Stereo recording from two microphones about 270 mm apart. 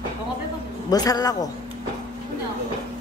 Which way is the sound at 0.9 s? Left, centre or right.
Centre.